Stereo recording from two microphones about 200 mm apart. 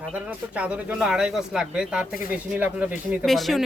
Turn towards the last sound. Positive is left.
turn(degrees=0)  # may be behind; listen again after turning